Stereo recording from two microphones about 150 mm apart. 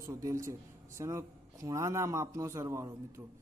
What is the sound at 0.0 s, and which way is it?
Speech, 20° right (ahead or behind).